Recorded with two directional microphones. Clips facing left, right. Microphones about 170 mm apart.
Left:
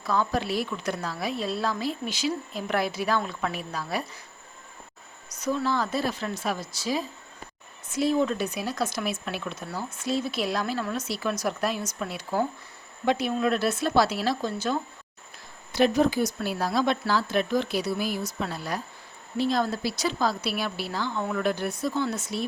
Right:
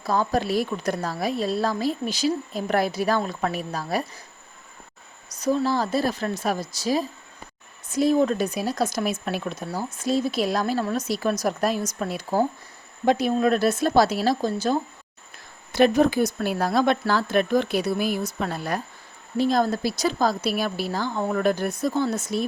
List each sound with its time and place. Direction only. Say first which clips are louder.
0.0 s speech: right 3 dB; 40° right (ahead or behind)
5.4 s speech: right 4 dB; 35° right (ahead or behind)
15.7 s speech: right 4 dB; 55° right (ahead or behind)